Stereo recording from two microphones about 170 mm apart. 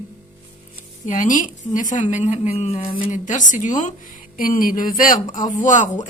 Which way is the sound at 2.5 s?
35° left (ahead or behind).